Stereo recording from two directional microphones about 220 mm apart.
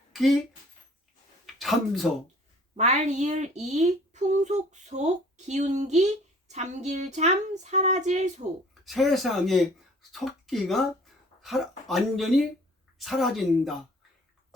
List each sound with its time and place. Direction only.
0.1 s a sound: centre (ahead or behind)
1.5 s speech: centre (ahead or behind)
2.7 s a woman's voice: 30° right (ahead or behind)
8.8 s speech: centre (ahead or behind)